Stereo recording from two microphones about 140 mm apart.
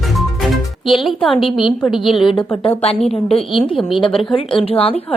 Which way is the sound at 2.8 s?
45° left (ahead or behind).